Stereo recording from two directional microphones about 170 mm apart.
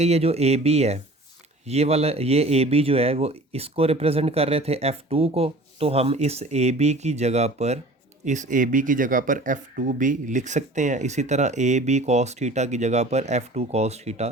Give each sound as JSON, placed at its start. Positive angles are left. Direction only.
{"t": 0.0, "sound": "a man's voice", "side_deg": -35}